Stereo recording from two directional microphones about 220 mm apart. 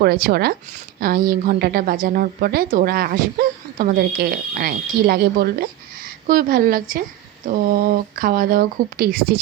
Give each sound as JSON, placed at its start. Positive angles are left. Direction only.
{"t": 0.0, "sound": "speech", "side_deg": -45}